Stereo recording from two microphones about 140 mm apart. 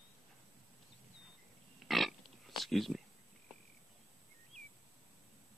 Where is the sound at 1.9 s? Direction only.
Centre (ahead or behind).